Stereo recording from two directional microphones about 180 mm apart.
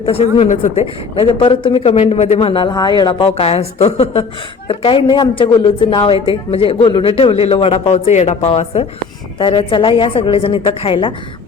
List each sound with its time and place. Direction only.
0.0 s a woman's voice: 35° left (ahead or behind)